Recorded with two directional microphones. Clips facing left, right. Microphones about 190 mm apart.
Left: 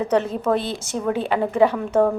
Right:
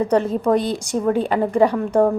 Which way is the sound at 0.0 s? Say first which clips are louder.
Right 3 dB; 10° right (ahead or behind).